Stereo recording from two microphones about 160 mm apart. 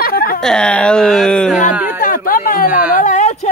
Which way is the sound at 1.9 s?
60° left (ahead or behind).